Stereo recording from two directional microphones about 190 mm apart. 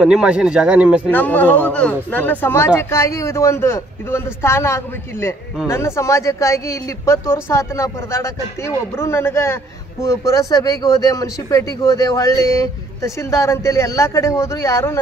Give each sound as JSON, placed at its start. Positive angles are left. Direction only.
{"t": 0.0, "sound": "speech", "side_deg": -5}
{"t": 1.1, "sound": "speech", "side_deg": 10}